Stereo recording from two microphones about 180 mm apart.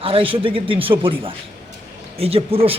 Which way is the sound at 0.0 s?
30° right (ahead or behind).